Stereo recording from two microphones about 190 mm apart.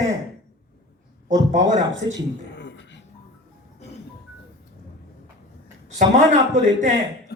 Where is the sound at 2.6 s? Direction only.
70° left (ahead or behind).